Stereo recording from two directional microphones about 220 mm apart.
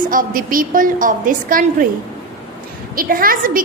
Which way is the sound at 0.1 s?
40° right (ahead or behind).